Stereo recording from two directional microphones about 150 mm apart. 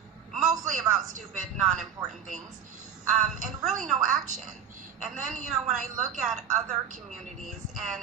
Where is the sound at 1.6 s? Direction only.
Centre (ahead or behind).